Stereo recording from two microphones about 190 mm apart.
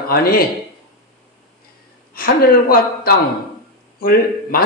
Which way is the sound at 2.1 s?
50° left (ahead or behind).